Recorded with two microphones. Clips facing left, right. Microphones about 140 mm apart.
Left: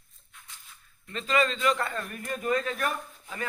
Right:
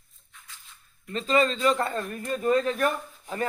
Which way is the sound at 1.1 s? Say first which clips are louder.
Right 3 dB; 35° right (ahead or behind).